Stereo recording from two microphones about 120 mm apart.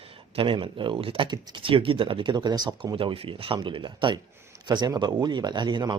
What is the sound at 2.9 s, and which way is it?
Speech, 50° right (ahead or behind).